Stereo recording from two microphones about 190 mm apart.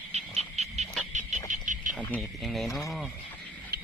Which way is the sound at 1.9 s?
5° left (ahead or behind).